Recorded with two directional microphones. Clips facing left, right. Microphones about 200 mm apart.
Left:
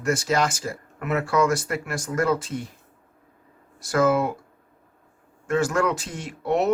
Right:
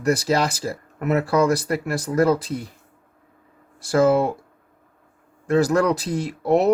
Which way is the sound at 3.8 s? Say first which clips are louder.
Right 3 dB; 30° right (ahead or behind).